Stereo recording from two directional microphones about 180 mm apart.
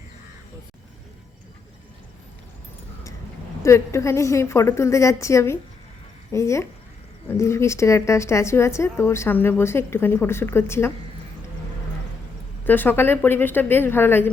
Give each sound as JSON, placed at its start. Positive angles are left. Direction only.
{"t": 3.6, "sound": "a woman's voice", "side_deg": 15}
{"t": 12.6, "sound": "a woman's voice", "side_deg": 10}